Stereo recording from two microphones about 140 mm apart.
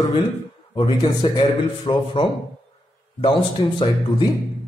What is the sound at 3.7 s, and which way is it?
Speech, 30° left (ahead or behind).